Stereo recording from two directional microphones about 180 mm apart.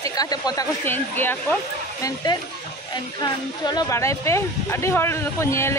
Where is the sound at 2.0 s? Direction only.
20° left (ahead or behind).